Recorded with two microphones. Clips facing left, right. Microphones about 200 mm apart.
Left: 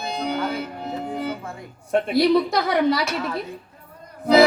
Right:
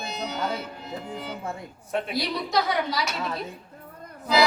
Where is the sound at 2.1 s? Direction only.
55° left (ahead or behind).